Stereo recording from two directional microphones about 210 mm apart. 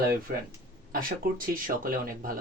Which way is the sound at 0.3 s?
45° right (ahead or behind).